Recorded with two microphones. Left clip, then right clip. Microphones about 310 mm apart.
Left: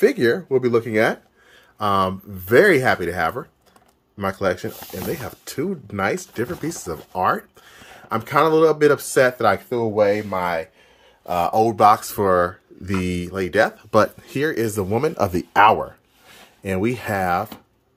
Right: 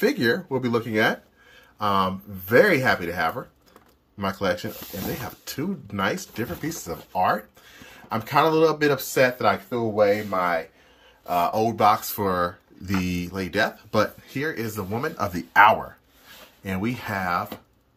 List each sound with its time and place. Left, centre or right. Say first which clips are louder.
0.0 s speech: left 5 dB; centre
10.3 s speech: left 1 dB; left